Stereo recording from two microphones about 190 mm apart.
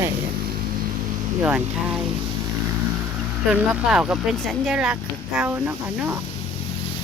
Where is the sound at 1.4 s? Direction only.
10° right (ahead or behind).